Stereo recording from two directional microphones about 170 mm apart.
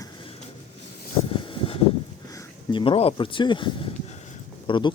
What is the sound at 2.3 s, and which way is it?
Speech, 30° left (ahead or behind).